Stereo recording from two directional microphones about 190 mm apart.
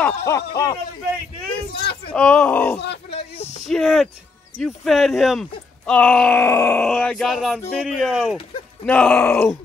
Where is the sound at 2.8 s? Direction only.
65° left (ahead or behind).